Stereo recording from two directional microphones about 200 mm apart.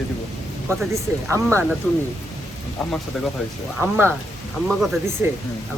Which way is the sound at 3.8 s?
10° right (ahead or behind).